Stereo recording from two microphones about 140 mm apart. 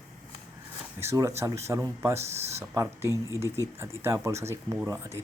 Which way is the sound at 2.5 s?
20° right (ahead or behind).